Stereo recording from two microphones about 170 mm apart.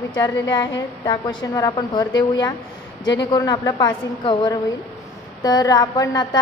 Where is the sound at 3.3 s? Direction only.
20° left (ahead or behind).